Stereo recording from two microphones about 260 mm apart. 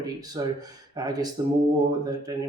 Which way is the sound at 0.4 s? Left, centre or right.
Centre.